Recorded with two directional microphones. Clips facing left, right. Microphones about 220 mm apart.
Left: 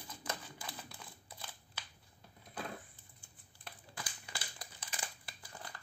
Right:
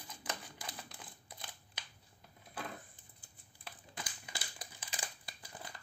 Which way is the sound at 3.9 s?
20° right (ahead or behind).